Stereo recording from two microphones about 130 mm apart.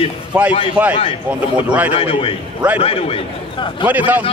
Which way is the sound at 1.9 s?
45° left (ahead or behind).